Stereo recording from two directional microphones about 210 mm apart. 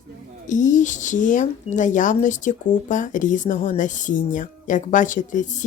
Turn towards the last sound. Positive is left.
turn(degrees=35)  # may be behind; listen again after turning